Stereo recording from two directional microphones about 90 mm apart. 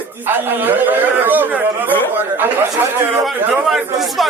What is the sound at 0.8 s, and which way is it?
Speech, 20° right (ahead or behind).